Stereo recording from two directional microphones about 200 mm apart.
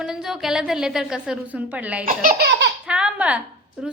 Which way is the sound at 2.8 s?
5° right (ahead or behind).